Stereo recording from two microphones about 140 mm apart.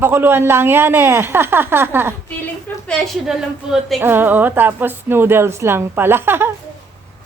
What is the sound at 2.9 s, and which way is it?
A woman's voice, 5° left (ahead or behind).